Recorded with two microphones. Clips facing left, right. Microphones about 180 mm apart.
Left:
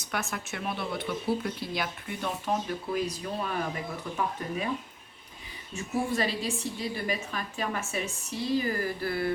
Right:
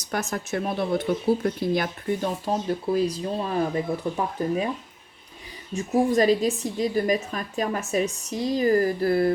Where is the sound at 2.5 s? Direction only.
30° right (ahead or behind).